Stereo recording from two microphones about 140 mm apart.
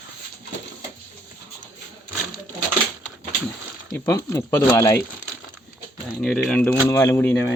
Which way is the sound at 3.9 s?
20° left (ahead or behind).